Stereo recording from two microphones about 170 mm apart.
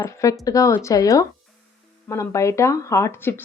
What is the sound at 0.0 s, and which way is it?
Speech, 20° left (ahead or behind).